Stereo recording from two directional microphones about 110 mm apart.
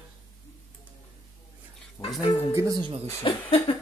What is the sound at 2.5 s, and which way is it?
Speech, 30° right (ahead or behind).